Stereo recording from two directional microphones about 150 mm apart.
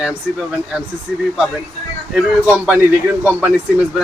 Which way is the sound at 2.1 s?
10° right (ahead or behind).